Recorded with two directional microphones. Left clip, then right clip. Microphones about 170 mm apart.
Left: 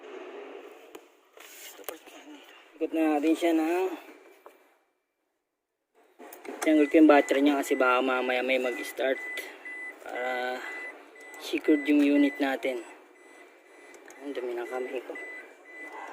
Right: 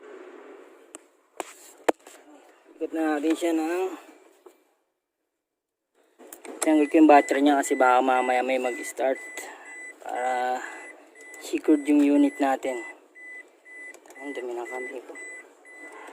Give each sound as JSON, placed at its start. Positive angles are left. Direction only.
{"t": 2.7, "sound": "speech", "side_deg": 0}
{"t": 3.3, "sound": "speech", "side_deg": -15}
{"t": 6.7, "sound": "speech", "side_deg": -10}
{"t": 13.9, "sound": "speech", "side_deg": -5}